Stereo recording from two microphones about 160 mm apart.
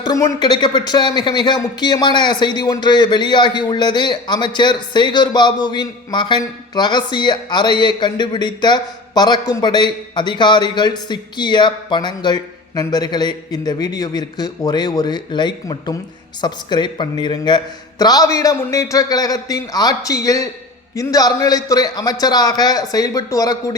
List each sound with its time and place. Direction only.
0.1 s speech: 20° left (ahead or behind)